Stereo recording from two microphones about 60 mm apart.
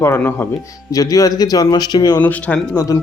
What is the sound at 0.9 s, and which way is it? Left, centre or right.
Speech, left.